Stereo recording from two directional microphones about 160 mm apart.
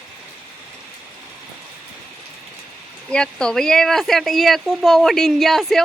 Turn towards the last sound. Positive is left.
turn(degrees=0)  # may be behind; listen again after turning